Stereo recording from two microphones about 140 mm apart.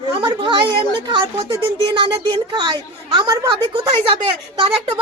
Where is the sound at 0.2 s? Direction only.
30° right (ahead or behind).